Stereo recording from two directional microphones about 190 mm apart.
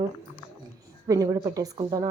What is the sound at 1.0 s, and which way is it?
A woman's voice, 15° right (ahead or behind).